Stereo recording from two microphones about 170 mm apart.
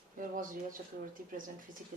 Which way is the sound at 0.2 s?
55° right (ahead or behind).